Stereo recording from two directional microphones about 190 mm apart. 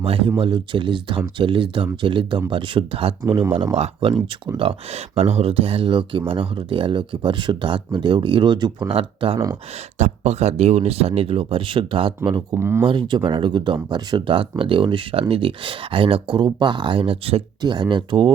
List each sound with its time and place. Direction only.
0.0 s speech: 30° right (ahead or behind)
3.2 s speech: 15° right (ahead or behind)
3.8 s speech: 30° right (ahead or behind); by 12.8 s 15° right (ahead or behind)
12.8 s speech: 25° right (ahead or behind)